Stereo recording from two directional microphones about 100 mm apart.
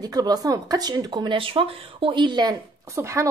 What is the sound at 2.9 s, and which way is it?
Speech, 30° right (ahead or behind).